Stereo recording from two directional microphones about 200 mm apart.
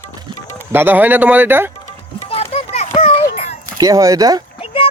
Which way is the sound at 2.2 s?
30° left (ahead or behind).